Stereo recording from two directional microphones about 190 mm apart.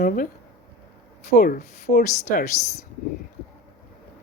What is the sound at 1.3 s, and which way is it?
Speech, 50° left (ahead or behind).